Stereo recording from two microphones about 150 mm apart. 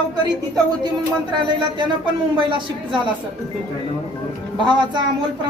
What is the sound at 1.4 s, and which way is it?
A woman's voice, 30° right (ahead or behind).